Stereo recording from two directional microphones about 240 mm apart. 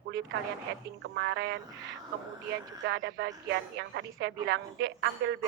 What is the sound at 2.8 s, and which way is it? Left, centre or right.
Speech, right.